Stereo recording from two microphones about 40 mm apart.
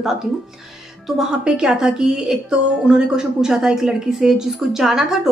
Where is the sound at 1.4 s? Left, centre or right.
Centre.